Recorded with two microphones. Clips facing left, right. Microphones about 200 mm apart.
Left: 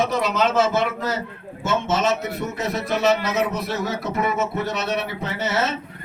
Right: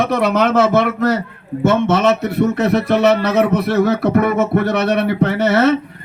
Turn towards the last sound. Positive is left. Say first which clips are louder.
# right 11 dB
turn(degrees=-60)  # may be behind; listen again after turning